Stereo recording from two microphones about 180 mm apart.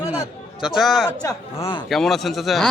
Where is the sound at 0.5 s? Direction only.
5° right (ahead or behind).